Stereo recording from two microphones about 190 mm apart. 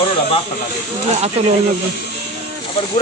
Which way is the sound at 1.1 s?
35° right (ahead or behind).